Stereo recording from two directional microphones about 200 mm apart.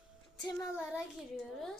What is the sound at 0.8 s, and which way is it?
Child singing, 5° right (ahead or behind).